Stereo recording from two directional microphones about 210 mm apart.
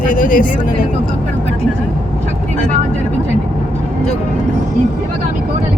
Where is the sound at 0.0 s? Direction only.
40° left (ahead or behind).